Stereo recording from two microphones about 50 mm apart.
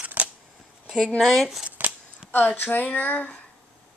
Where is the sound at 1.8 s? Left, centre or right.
Right.